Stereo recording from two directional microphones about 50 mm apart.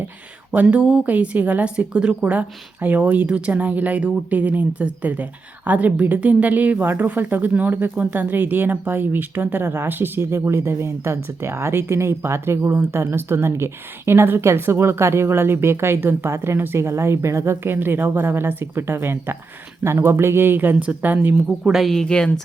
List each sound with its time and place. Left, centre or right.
0.5 s a woman's voice: right
3.2 s a woman's voice: right
19.8 s a woman's voice: right
20.7 s a woman's voice: right
21.6 s speech: centre
22.0 s speech: centre